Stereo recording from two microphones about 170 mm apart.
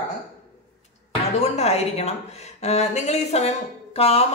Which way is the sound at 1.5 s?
40° left (ahead or behind).